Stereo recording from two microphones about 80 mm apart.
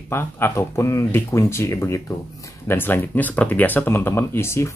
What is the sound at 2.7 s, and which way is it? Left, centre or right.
Speech, left.